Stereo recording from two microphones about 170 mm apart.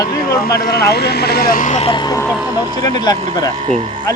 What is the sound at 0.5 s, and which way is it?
Speech, 70° left (ahead or behind).